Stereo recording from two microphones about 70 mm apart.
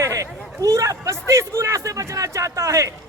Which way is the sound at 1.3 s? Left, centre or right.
Right.